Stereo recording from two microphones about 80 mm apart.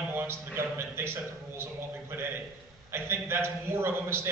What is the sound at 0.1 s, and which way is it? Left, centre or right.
A man's voice, right.